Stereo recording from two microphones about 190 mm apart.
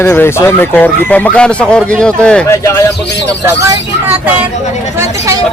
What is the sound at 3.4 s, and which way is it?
Speech, 10° right (ahead or behind).